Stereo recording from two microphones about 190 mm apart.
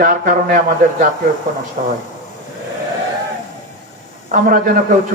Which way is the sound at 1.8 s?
35° right (ahead or behind).